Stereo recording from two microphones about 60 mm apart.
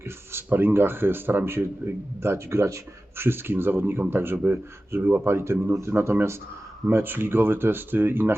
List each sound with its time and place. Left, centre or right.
0.0 s speech: right